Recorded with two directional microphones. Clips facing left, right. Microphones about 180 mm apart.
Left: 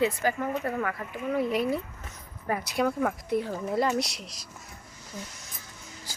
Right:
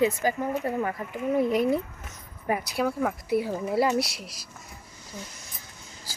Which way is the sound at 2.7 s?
Centre (ahead or behind).